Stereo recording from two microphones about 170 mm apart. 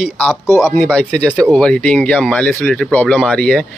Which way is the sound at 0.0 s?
10° left (ahead or behind).